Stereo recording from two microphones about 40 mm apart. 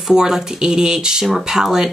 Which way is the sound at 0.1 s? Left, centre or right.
Centre.